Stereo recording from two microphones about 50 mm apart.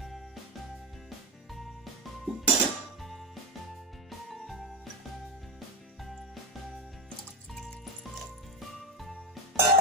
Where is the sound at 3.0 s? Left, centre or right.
Centre.